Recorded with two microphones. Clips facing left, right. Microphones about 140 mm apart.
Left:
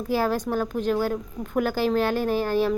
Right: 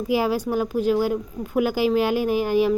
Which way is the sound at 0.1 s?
10° right (ahead or behind).